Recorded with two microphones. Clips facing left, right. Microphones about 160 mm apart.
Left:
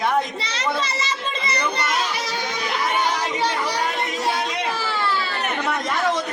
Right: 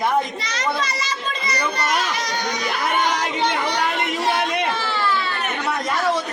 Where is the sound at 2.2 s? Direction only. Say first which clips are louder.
Right 2 dB; 5° left (ahead or behind).